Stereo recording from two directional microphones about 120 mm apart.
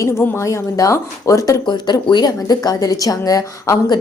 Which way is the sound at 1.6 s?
40° left (ahead or behind).